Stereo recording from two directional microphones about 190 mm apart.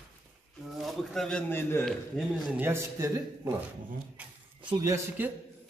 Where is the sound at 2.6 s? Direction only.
15° right (ahead or behind).